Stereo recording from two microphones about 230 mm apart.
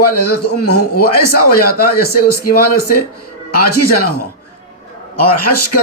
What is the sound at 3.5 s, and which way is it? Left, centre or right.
A man's voice, left.